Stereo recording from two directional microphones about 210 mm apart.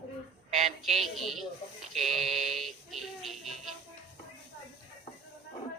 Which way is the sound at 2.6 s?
Centre (ahead or behind).